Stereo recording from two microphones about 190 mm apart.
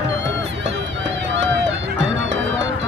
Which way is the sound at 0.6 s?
70° right (ahead or behind).